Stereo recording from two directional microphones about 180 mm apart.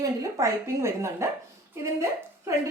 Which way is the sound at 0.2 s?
15° right (ahead or behind).